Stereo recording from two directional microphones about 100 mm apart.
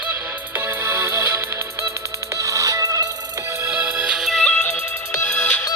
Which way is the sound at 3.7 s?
15° right (ahead or behind).